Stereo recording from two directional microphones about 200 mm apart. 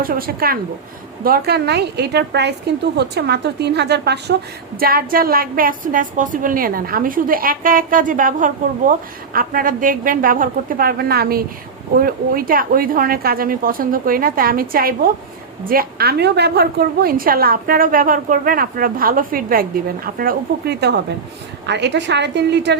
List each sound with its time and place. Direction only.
0.0 s a woman's voice: 45° right (ahead or behind)